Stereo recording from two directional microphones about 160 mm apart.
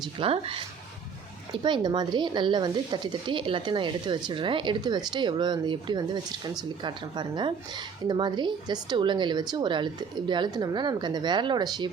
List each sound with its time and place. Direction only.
0.0 s speech: 35° right (ahead or behind)
1.6 s speech: 30° right (ahead or behind)